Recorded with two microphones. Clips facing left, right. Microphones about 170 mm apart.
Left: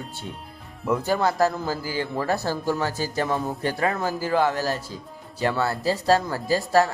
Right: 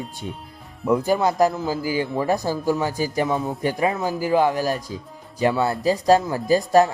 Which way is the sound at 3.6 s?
15° right (ahead or behind).